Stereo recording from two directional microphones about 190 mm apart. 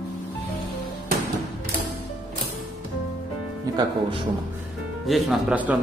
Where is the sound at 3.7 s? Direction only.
20° right (ahead or behind).